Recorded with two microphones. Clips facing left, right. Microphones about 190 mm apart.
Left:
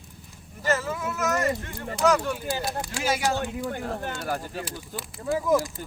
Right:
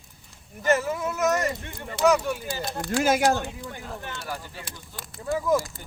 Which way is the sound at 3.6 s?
55° left (ahead or behind).